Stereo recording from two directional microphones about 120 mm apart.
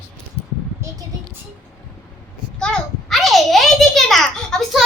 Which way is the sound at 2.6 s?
5° left (ahead or behind).